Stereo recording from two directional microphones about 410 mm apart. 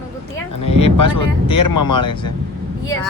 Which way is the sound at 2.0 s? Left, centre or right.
Centre.